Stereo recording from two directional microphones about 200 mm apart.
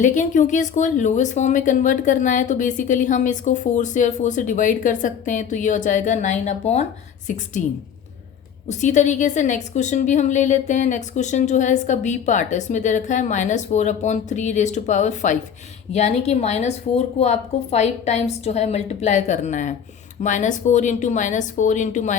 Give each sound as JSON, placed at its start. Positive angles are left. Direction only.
{"t": 0.0, "sound": "speech", "side_deg": 40}
{"t": 8.8, "sound": "speech", "side_deg": 35}